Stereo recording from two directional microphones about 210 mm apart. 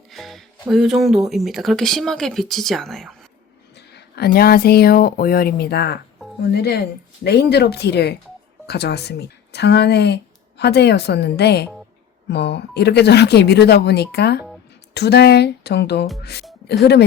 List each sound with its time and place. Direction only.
0.1 s speech: centre (ahead or behind)
3.8 s speech: 50° left (ahead or behind)